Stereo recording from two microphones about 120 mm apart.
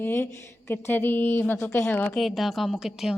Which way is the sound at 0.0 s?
20° left (ahead or behind).